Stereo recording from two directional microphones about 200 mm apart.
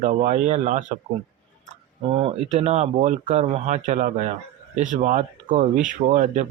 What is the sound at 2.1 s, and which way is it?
Speech, 30° right (ahead or behind).